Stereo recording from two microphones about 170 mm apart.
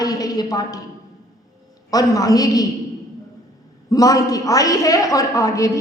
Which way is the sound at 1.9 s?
20° left (ahead or behind).